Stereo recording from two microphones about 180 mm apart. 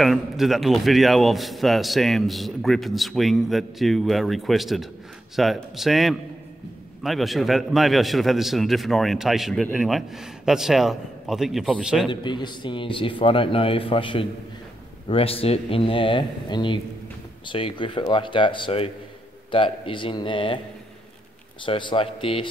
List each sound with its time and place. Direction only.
0.0 s a man's voice: centre (ahead or behind)
12.1 s a man's voice: 25° left (ahead or behind)
21.6 s a man's voice: 25° left (ahead or behind)